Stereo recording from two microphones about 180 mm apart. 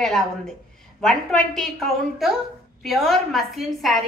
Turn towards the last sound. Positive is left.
turn(degrees=0)  # may be behind; listen again after turning